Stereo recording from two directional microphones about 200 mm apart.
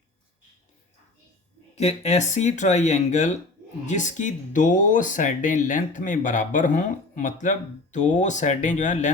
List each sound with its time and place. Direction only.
1.7 s speech: 35° left (ahead or behind)